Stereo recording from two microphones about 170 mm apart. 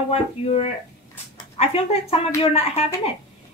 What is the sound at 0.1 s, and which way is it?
Speech, 35° left (ahead or behind).